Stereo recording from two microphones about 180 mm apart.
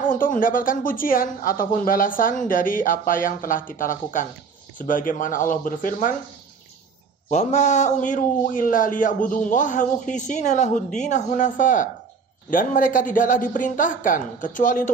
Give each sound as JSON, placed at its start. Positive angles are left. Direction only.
{"t": 0.0, "sound": "a man's voice", "side_deg": 50}
{"t": 7.2, "sound": "a man's voice", "side_deg": 40}